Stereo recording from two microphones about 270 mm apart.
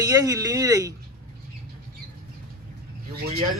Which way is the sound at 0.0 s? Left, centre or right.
Centre.